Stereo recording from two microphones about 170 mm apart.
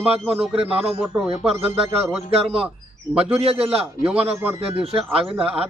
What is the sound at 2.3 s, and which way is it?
Speech, 35° right (ahead or behind).